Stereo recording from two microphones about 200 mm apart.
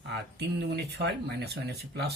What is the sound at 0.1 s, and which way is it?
Speech, 55° right (ahead or behind).